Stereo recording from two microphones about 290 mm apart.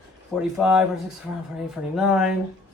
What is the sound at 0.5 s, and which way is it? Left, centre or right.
Speech, centre.